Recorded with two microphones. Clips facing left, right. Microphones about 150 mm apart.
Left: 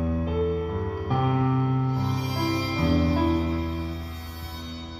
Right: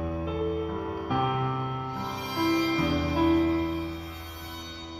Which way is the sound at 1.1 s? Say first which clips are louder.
Left 4 dB; 35° left (ahead or behind).